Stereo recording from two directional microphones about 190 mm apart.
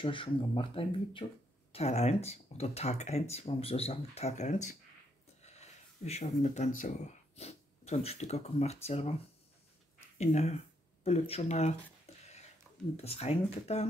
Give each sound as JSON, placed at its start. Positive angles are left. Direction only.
{"t": 0.0, "sound": "speech", "side_deg": 25}
{"t": 10.1, "sound": "speech", "side_deg": 35}
{"t": 12.1, "sound": "a sound", "side_deg": 35}
{"t": 12.9, "sound": "speech", "side_deg": 35}